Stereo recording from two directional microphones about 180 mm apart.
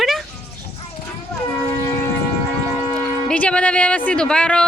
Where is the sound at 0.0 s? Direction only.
Centre (ahead or behind).